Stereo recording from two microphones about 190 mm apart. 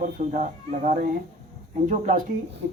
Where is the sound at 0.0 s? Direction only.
40° right (ahead or behind).